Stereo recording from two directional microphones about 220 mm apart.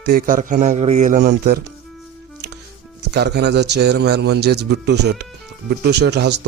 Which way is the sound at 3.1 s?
50° right (ahead or behind).